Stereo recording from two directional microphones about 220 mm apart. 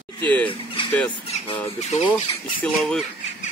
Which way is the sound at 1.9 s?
30° left (ahead or behind).